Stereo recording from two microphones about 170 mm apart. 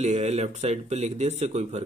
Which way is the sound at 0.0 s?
40° right (ahead or behind).